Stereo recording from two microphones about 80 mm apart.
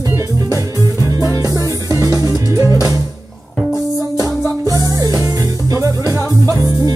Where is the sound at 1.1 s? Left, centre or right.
Right.